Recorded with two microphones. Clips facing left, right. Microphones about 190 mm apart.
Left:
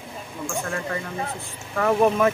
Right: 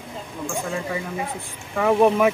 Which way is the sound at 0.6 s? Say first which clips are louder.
Right 1 dB; 10° right (ahead or behind).